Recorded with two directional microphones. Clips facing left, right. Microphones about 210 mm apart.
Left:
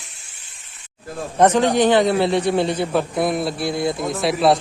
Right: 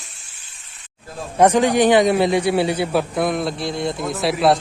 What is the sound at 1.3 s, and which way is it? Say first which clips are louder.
A man's voice: right 1 dB; 10° right (ahead or behind).